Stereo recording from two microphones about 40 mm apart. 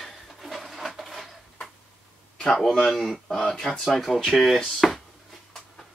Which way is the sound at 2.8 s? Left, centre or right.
Centre.